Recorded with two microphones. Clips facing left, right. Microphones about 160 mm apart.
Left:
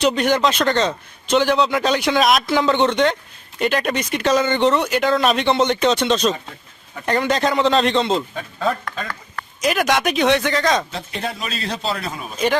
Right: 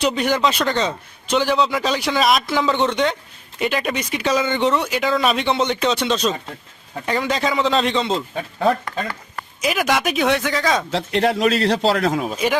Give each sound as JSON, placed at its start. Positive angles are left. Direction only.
{"t": 0.0, "sound": "a man's voice", "side_deg": -5}
{"t": 10.9, "sound": "a man's voice", "side_deg": -80}